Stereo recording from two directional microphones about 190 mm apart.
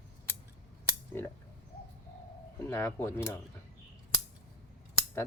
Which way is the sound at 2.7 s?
15° left (ahead or behind).